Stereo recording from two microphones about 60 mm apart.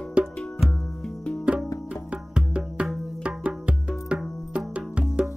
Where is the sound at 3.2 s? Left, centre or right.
Centre.